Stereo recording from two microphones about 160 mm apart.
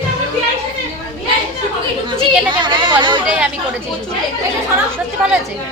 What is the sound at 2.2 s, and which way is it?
A woman's voice, 30° right (ahead or behind).